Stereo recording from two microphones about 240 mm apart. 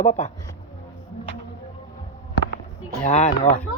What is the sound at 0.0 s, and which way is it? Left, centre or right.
Speech, left.